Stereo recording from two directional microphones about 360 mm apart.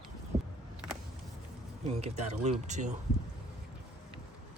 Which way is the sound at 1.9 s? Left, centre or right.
Centre.